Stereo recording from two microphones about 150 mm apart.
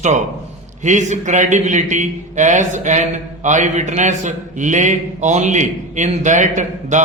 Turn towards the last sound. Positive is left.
turn(degrees=-55)  # may be behind; listen again after turning